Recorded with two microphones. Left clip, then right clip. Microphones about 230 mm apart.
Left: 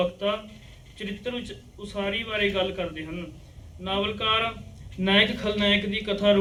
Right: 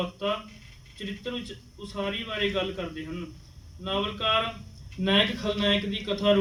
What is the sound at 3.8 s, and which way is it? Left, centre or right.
A man's voice, centre.